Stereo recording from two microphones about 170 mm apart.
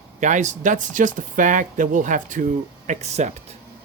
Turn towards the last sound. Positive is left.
turn(degrees=-40)  # may be behind; listen again after turning